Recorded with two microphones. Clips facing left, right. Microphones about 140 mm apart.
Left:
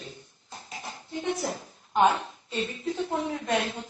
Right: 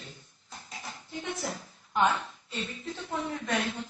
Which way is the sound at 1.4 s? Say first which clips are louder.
Left 4 dB; 25° left (ahead or behind).